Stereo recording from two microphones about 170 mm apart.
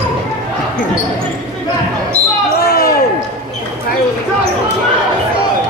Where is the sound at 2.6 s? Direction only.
65° left (ahead or behind).